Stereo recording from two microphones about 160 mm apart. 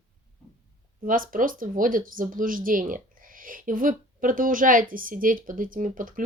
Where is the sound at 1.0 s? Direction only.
55° right (ahead or behind).